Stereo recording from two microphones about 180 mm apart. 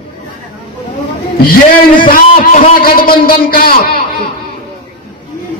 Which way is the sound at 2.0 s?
50° left (ahead or behind).